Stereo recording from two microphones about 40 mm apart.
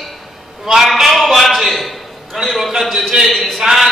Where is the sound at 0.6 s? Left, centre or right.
Centre.